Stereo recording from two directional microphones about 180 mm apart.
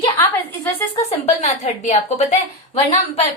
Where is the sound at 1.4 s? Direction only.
35° left (ahead or behind).